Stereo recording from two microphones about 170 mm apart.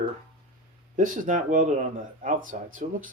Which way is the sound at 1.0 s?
50° right (ahead or behind).